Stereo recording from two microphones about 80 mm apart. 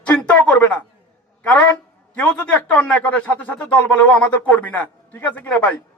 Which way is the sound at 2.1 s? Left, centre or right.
Centre.